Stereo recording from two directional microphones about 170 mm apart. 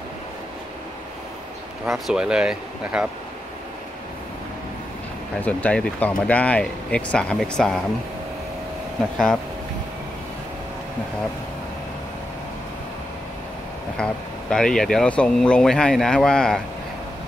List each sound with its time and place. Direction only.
1.9 s speech: 5° right (ahead or behind)
5.4 s speech: 10° left (ahead or behind)
13.9 s speech: 5° left (ahead or behind)